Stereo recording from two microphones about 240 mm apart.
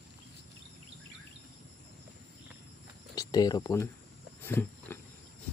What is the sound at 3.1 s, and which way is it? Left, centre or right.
Speech, centre.